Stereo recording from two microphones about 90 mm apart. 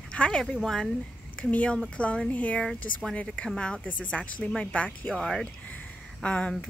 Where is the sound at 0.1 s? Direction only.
10° left (ahead or behind).